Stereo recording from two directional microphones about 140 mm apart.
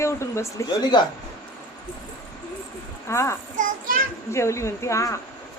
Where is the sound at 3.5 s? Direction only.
80° right.